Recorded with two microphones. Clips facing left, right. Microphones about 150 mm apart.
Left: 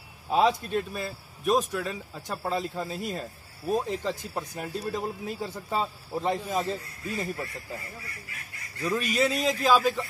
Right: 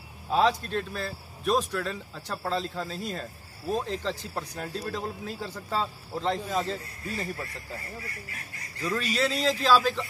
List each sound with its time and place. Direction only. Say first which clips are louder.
0.3 s speech: left 1 dB; 15° left (ahead or behind)
1.8 s a man's voice: even; 5° left (ahead or behind)
2.2 s speech: left 1 dB; 15° left (ahead or behind)
8.8 s speech: left 2 dB; 15° left (ahead or behind)